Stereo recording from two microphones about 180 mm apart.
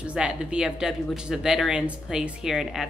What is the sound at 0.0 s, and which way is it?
Speech, 5° right (ahead or behind).